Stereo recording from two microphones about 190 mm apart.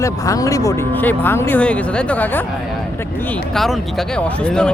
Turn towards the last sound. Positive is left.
turn(degrees=5)  # may be behind; listen again after turning